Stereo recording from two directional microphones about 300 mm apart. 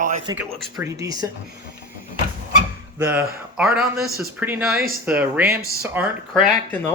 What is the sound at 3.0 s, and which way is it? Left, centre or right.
Speech, centre.